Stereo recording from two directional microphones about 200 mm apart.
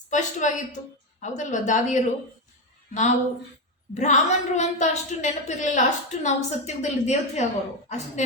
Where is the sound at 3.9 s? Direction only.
35° left (ahead or behind).